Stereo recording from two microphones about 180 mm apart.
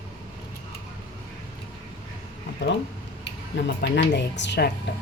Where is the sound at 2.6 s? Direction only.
85° left.